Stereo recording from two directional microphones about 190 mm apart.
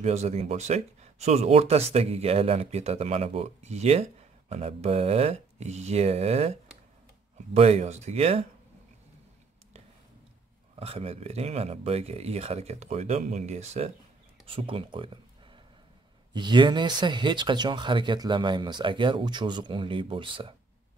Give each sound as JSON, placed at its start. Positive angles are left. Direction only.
{"t": 0.0, "sound": "speech", "side_deg": -35}
{"t": 10.8, "sound": "speech", "side_deg": -30}
{"t": 14.4, "sound": "a sound", "side_deg": -30}
{"t": 16.3, "sound": "speech", "side_deg": -25}